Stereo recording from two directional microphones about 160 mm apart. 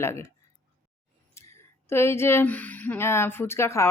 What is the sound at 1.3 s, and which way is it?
Speech, 15° left (ahead or behind).